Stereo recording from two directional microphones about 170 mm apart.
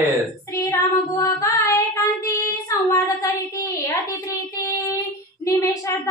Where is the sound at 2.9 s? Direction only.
20° left (ahead or behind).